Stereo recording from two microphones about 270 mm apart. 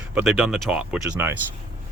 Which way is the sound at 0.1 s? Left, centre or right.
Centre.